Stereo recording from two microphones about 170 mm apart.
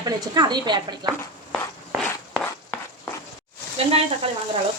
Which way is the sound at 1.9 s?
Centre (ahead or behind).